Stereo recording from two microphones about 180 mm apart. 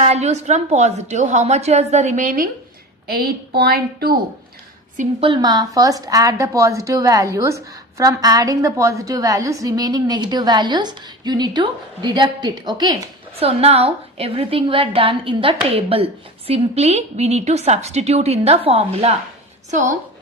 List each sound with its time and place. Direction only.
0.0 s a woman's voice: 35° right (ahead or behind); by 4.2 s 60° right (ahead or behind)
5.2 s a woman's voice: 25° right (ahead or behind)
19.7 s a woman's voice: 45° right (ahead or behind)